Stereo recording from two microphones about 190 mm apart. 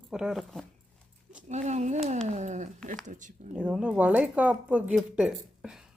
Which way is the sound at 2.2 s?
40° right (ahead or behind).